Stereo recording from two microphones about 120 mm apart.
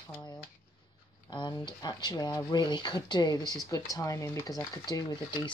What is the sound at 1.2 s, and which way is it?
Speech, 40° left (ahead or behind).